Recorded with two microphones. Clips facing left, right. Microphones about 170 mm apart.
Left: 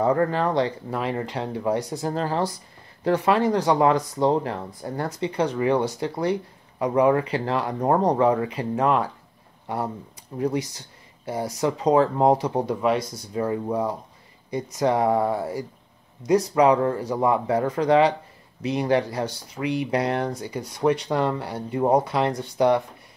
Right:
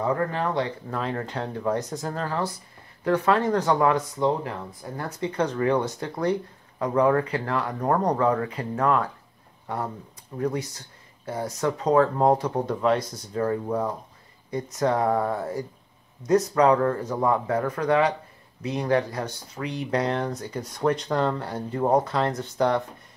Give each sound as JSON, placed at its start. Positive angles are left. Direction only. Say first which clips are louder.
{"t": 0.0, "sound": "speech", "louder": "left 4 dB", "side_deg": 35}
{"t": 0.8, "sound": "speech", "louder": "left 2 dB", "side_deg": 15}
{"t": 2.0, "sound": "speech", "louder": "left 6 dB", "side_deg": 25}
{"t": 3.9, "sound": "speech", "louder": "left 3 dB", "side_deg": 35}
{"t": 5.2, "sound": "speech", "louder": "left 1 dB", "side_deg": 15}
{"t": 10.3, "sound": "speech", "louder": "left 2 dB", "side_deg": 20}
{"t": 18.7, "sound": "speech", "louder": "left 2 dB", "side_deg": 15}